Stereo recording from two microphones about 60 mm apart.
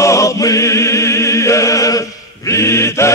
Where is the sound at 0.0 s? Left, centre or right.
Left.